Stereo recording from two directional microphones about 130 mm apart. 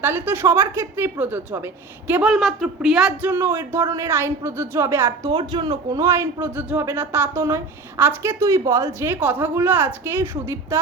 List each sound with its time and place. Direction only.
0.0 s a woman's voice: 15° right (ahead or behind)
2.3 s a man's voice: centre (ahead or behind); by 5.1 s 20° right (ahead or behind)
5.2 s a man's voice: 35° right (ahead or behind); by 10.8 s 20° right (ahead or behind)